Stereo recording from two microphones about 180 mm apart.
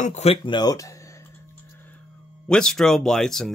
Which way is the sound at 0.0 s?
40° left (ahead or behind).